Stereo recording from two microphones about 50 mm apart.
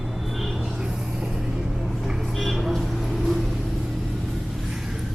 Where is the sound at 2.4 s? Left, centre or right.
Centre.